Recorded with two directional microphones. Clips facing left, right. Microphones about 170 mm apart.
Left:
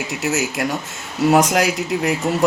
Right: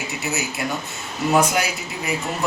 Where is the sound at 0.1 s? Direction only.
90° left.